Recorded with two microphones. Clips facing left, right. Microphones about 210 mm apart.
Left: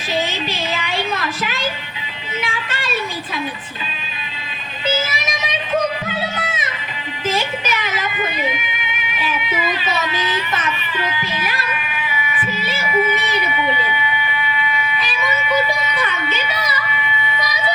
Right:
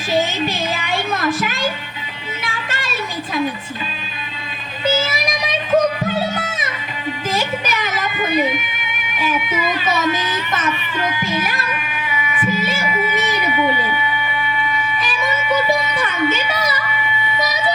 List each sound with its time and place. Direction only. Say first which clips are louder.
0.1 s a sound: right 4 dB; 50° right (ahead or behind)
2.4 s music: left 1 dB; 45° right (ahead or behind)
4.9 s music: right 2 dB; 45° right (ahead or behind)
9.1 s speech: right 3 dB; 45° right (ahead or behind)
10.9 s music: right 3 dB; 45° right (ahead or behind)
13.1 s a sound: right 3 dB; 45° right (ahead or behind)
16.0 s music: right 4 dB; 50° right (ahead or behind)